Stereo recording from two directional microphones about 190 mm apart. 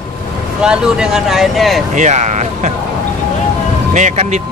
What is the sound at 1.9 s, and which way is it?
Speech, 40° right (ahead or behind).